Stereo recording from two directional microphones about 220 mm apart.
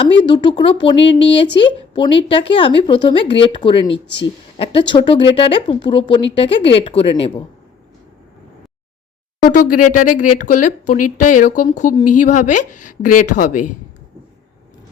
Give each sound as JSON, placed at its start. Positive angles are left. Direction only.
{"t": 0.3, "sound": "speech", "side_deg": 20}
{"t": 9.4, "sound": "speech", "side_deg": 35}